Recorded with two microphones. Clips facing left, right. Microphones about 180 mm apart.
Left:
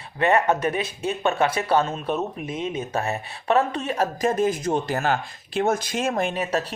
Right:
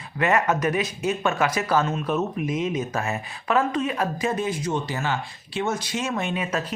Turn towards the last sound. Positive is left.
turn(degrees=40)  # may be behind; listen again after turning